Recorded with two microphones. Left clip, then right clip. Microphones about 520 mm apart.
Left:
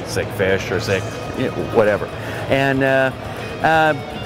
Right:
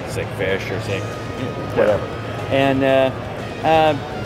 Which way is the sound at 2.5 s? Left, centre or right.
Left.